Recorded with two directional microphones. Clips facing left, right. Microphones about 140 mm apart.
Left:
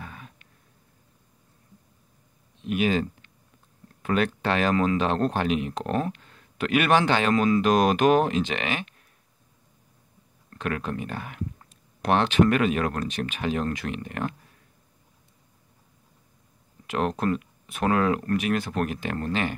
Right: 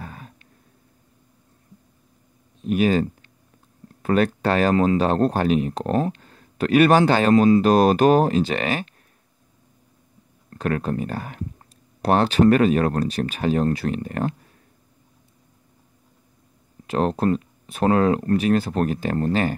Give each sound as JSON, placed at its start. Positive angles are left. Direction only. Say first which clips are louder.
{"t": 0.0, "sound": "a sound", "louder": "right 4 dB", "side_deg": -40}
{"t": 2.6, "sound": "speech", "louder": "right 5 dB", "side_deg": -40}
{"t": 10.5, "sound": "speech", "louder": "right 6 dB", "side_deg": -40}
{"t": 16.8, "sound": "speech", "louder": "right 5 dB", "side_deg": -35}